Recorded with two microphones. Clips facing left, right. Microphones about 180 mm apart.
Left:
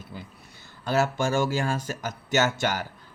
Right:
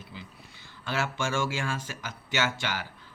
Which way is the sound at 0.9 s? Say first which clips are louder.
Left 6 dB; 40° left (ahead or behind).